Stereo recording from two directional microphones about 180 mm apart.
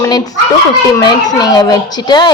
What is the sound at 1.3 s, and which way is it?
Speech, 20° left (ahead or behind).